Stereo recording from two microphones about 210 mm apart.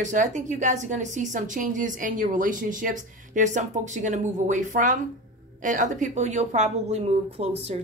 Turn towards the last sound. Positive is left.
turn(degrees=-30)  # may be behind; listen again after turning